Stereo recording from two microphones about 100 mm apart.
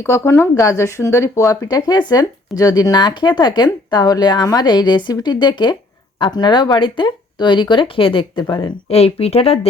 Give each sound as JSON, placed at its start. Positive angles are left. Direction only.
{"t": 0.0, "sound": "speech", "side_deg": 25}
{"t": 8.9, "sound": "speech", "side_deg": 90}